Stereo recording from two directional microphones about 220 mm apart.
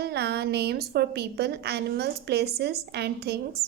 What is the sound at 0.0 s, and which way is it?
A woman's voice, 50° right (ahead or behind).